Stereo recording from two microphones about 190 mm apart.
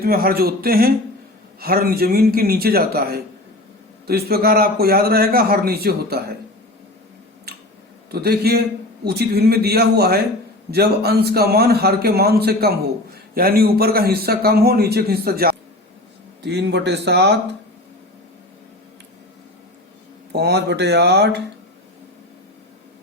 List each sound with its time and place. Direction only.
0.0 s a man's voice: 50° right (ahead or behind)
7.5 s a sound: 55° right (ahead or behind)
8.1 s a man's voice: 55° right (ahead or behind)
16.4 s a man's voice: 65° right (ahead or behind)
20.3 s a man's voice: 65° right (ahead or behind)